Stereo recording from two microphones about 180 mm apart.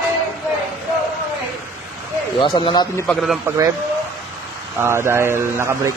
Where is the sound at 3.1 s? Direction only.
Centre (ahead or behind).